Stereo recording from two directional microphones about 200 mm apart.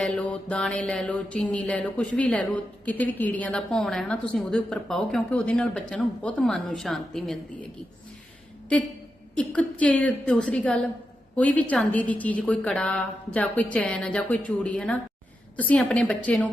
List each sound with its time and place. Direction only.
0.0 s mantra: 5° left (ahead or behind)
9.3 s mantra: 5° left (ahead or behind)
11.3 s a woman's voice: 5° left (ahead or behind)